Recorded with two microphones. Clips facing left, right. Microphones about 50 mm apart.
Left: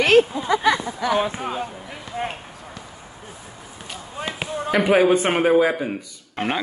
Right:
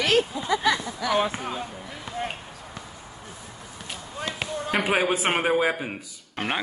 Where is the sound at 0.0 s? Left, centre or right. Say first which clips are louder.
Left 7 dB; left.